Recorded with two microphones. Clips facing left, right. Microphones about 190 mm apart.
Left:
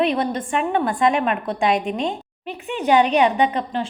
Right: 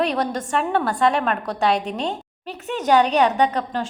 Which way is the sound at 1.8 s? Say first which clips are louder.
Left 2 dB; 40° right (ahead or behind).